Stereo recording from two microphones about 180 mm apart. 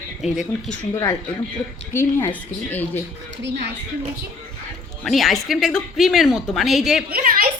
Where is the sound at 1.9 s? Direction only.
15° left (ahead or behind).